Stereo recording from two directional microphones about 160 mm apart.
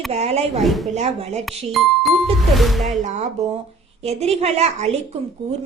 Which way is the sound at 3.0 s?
50° right (ahead or behind).